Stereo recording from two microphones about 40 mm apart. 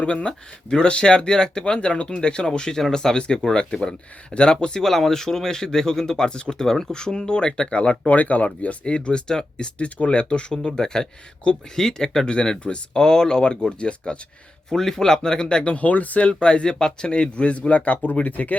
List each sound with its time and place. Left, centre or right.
0.0 s speech: left
4.8 s speech: centre
6.7 s speech: centre; by 8.7 s left
9.0 s speech: left
9.7 s speech: left
14.7 s speech: centre; by 16.3 s left
16.4 s speech: left
17.1 s speech: left